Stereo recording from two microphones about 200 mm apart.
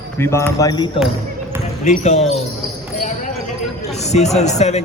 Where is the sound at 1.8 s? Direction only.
35° left (ahead or behind).